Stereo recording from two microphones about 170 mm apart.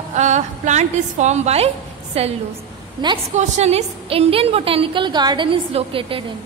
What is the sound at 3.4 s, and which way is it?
A woman's voice, 40° right (ahead or behind).